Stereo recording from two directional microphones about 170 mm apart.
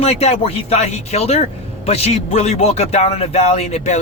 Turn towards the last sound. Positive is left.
turn(degrees=40)  # may be behind; listen again after turning